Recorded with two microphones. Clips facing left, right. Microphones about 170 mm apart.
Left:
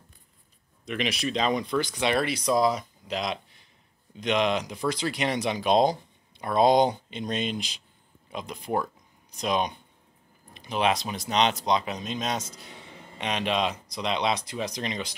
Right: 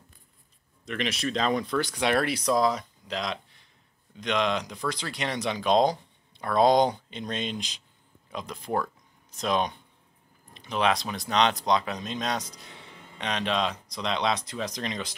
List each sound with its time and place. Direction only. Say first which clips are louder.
0.8 s speech: left 1 dB; 10° left (ahead or behind)
1.8 s speech: right 1 dB; 5° right (ahead or behind)
2.4 s speech: left 1 dB; 10° left (ahead or behind)
6.4 s speech: even; 20° left (ahead or behind)
7.1 s speech: left 3 dB; 10° left (ahead or behind)
10.5 s a sound: even; 10° left (ahead or behind)
10.9 s speech: even; 20° left (ahead or behind)
13.2 s speech: left 1 dB; 10° left (ahead or behind)